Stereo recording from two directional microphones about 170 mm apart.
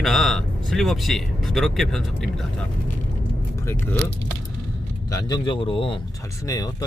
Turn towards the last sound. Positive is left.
turn(degrees=20)  # may be behind; listen again after turning